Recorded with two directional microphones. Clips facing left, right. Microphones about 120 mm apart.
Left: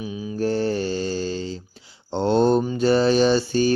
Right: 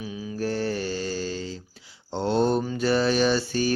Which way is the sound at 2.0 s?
25° left (ahead or behind).